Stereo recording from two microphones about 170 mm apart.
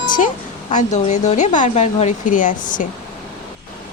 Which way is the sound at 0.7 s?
45° left (ahead or behind).